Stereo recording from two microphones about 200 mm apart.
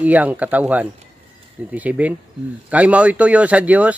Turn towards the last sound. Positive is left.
turn(degrees=-5)  # may be behind; listen again after turning